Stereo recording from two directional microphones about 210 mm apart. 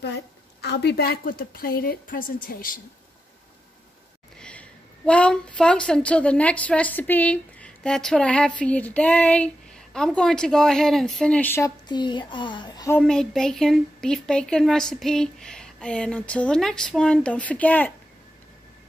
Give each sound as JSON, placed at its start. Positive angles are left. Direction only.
{"t": 0.0, "sound": "a woman's voice", "side_deg": 50}
{"t": 4.4, "sound": "a woman's voice", "side_deg": 5}
{"t": 13.0, "sound": "a woman's voice", "side_deg": 0}